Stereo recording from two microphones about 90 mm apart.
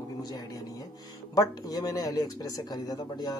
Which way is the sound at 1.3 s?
45° left (ahead or behind).